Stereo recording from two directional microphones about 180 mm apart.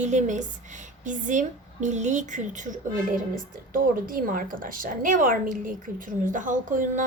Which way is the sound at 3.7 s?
50° right (ahead or behind).